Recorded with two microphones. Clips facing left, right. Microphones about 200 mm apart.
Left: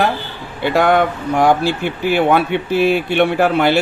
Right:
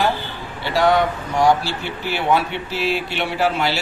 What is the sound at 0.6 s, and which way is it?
Speech, 55° left (ahead or behind).